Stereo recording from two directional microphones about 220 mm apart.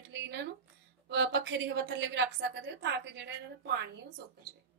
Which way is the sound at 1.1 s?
55° right (ahead or behind).